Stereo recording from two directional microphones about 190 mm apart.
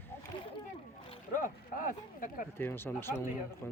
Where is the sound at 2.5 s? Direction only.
10° left (ahead or behind).